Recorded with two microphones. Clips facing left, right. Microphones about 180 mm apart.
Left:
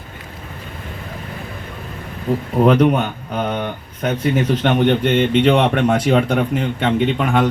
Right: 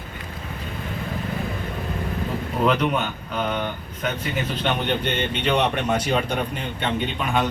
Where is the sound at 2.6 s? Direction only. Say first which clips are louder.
Left 7 dB; 50° left (ahead or behind).